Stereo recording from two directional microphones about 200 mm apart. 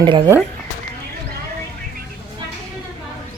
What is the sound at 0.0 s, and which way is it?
Speech, 25° right (ahead or behind).